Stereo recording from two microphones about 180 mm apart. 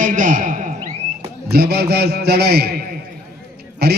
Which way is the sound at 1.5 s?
65° right (ahead or behind).